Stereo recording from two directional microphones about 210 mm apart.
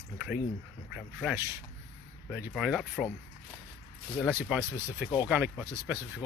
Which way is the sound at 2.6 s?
5° right (ahead or behind).